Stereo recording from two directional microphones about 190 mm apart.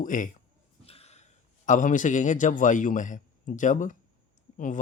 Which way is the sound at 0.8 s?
30° left (ahead or behind).